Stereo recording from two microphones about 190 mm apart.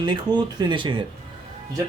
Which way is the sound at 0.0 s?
25° right (ahead or behind).